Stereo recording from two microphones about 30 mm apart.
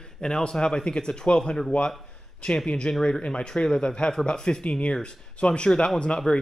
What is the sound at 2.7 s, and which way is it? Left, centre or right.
Speech, left.